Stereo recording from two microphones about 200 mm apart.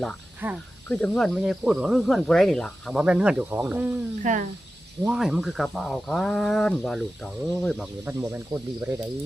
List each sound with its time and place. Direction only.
0.4 s speech: 10° right (ahead or behind)
0.9 s speech: 5° left (ahead or behind)
4.2 s speech: 40° right (ahead or behind)
5.0 s speech: centre (ahead or behind)
8.0 s speech: 10° right (ahead or behind)